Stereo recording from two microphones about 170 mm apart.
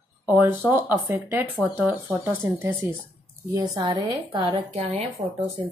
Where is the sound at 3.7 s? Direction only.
25° right (ahead or behind).